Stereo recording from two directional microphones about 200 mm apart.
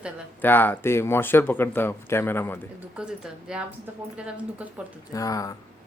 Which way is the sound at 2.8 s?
5° right (ahead or behind).